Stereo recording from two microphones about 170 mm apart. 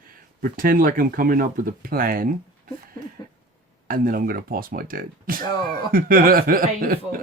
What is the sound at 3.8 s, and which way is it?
Speech, 55° right (ahead or behind).